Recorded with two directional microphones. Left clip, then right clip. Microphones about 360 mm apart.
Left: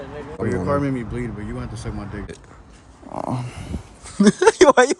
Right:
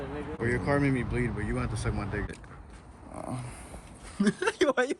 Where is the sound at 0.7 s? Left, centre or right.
Centre.